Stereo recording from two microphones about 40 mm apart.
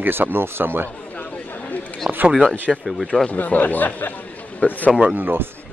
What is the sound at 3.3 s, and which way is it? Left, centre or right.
Speech, left.